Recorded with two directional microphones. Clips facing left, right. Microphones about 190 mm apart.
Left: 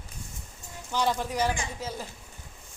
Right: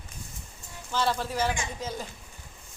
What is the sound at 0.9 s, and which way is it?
A woman's voice, 15° left (ahead or behind).